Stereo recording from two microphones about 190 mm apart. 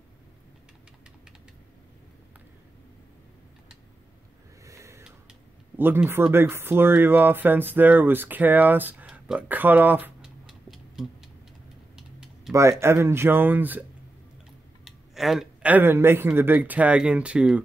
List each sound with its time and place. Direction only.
4.6 s a sound: 15° right (ahead or behind)
5.8 s speech: 10° right (ahead or behind)
12.5 s speech: 15° right (ahead or behind)
14.9 s speech: centre (ahead or behind)